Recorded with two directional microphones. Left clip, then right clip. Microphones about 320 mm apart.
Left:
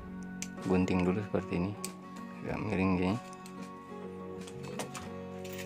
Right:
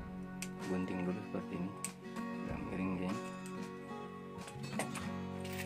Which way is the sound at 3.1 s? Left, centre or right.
Centre.